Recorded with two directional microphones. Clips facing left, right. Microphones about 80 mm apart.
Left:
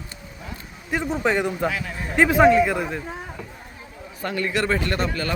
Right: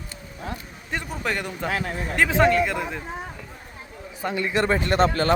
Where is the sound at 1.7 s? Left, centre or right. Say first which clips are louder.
Right 3 dB; right.